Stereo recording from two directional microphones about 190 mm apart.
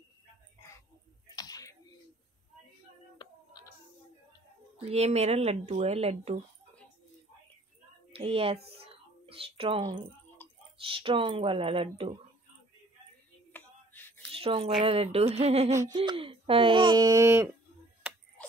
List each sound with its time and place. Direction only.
1.3 s finger snapping: 20° left (ahead or behind)
3.2 s music: 20° left (ahead or behind)
4.7 s speech: 35° right (ahead or behind)
8.1 s speech: 30° right (ahead or behind)
13.5 s a sound: 10° left (ahead or behind)
14.3 s speech: 30° right (ahead or behind)
15.7 s a sound: 15° right (ahead or behind)
16.0 s speech: 30° right (ahead or behind)